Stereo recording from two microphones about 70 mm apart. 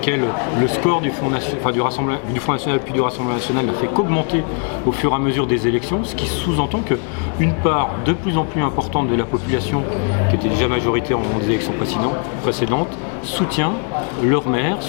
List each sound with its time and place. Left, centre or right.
0.0 s speech: centre
7.4 s speech: centre